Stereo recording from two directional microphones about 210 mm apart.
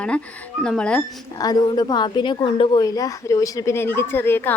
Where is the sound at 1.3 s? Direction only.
20° left (ahead or behind).